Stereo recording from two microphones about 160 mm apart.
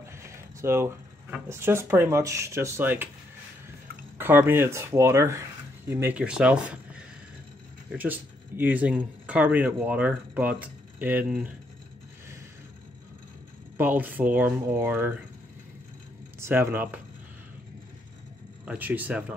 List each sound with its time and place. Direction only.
0.0 s speech: 15° right (ahead or behind)
4.2 s speech: 10° right (ahead or behind)
13.7 s speech: 10° right (ahead or behind)
16.3 s speech: 15° right (ahead or behind)
18.7 s speech: 10° right (ahead or behind)